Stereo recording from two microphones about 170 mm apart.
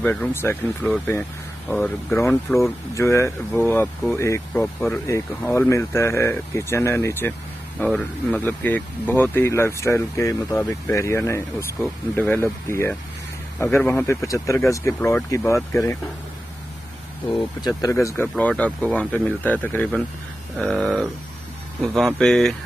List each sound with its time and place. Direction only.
0.0 s speech: 10° left (ahead or behind)
17.6 s speech: 20° left (ahead or behind); by 22.6 s centre (ahead or behind)